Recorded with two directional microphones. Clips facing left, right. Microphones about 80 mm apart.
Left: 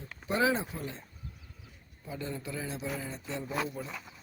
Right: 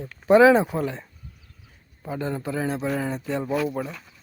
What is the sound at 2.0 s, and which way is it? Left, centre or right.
A man's voice, right.